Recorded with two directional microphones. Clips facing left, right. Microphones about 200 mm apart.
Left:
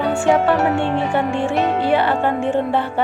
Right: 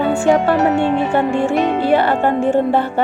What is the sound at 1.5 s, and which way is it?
Music, 45° right (ahead or behind).